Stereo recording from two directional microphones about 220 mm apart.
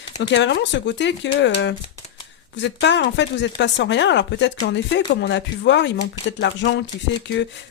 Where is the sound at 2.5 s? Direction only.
55° left (ahead or behind).